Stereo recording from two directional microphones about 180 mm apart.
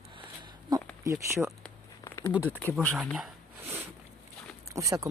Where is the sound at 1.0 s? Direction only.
15° right (ahead or behind).